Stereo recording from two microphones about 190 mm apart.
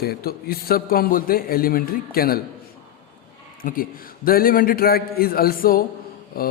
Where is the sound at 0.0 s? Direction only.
55° left (ahead or behind).